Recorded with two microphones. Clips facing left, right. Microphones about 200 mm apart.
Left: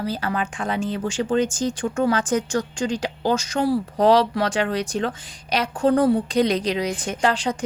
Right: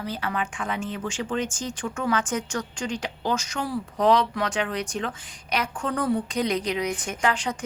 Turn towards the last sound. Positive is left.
turn(degrees=35)  # may be behind; listen again after turning